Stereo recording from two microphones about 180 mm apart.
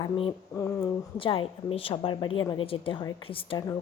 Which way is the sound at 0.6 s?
15° left (ahead or behind).